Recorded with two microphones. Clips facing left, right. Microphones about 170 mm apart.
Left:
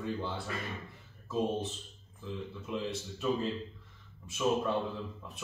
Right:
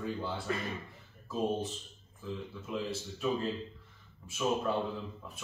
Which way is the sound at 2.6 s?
Centre (ahead or behind).